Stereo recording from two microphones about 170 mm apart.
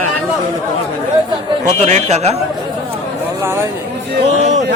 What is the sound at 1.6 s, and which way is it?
Speech, 45° right (ahead or behind).